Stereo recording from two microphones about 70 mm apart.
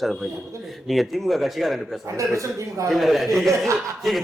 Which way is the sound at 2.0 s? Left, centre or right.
Right.